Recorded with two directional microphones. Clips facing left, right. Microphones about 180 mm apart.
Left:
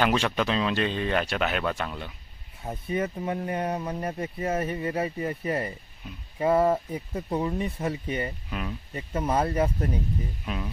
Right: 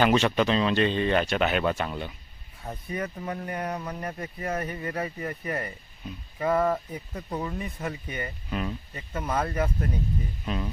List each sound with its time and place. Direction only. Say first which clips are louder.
0.0 s speech: right 3 dB; centre (ahead or behind)
2.6 s speech: left 4 dB; 25° left (ahead or behind)
8.5 s speech: right 3 dB; centre (ahead or behind)
8.9 s speech: left 5 dB; 30° left (ahead or behind)
10.4 s speech: right 2 dB; 5° left (ahead or behind)